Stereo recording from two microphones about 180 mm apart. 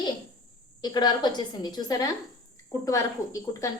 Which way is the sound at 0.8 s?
25° left (ahead or behind).